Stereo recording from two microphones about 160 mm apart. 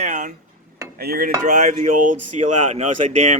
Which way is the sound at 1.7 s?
45° right (ahead or behind).